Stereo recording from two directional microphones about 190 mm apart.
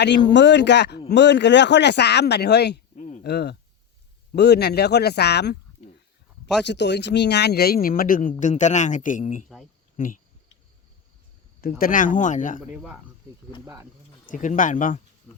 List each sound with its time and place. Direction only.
0.3 s speech: 70° left (ahead or behind)
2.9 s a sound: 40° left (ahead or behind)
3.2 s speech: 60° left (ahead or behind)
5.8 s a sound: 35° left (ahead or behind)
6.7 s speech: 65° left (ahead or behind); by 9.5 s 40° left (ahead or behind)
11.8 s speech: 45° left (ahead or behind)
12.7 s speech: 5° right (ahead or behind)
14.3 s speech: 45° left (ahead or behind)
15.3 s insect: 5° left (ahead or behind)